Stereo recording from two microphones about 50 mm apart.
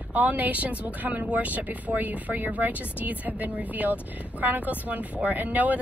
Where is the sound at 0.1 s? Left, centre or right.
Right.